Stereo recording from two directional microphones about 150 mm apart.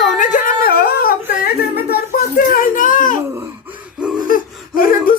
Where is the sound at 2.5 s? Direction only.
65° left (ahead or behind).